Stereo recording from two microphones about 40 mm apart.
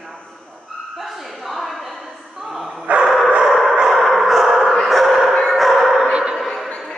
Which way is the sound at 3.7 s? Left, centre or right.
Centre.